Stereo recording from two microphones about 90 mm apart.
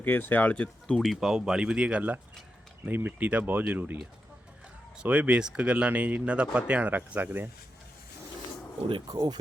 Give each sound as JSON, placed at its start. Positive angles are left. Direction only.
{"t": 0.0, "sound": "speech", "side_deg": 20}
{"t": 5.0, "sound": "speech", "side_deg": -15}
{"t": 9.0, "sound": "speech", "side_deg": -50}